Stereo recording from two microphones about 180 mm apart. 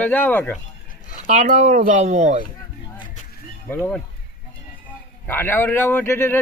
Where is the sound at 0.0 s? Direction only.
10° left (ahead or behind).